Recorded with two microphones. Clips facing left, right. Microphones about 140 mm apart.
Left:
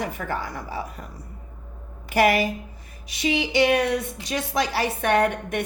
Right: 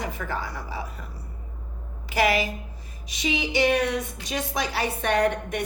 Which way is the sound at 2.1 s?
50° left (ahead or behind).